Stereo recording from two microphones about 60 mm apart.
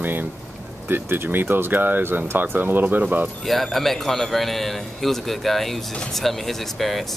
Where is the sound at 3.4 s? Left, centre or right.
Centre.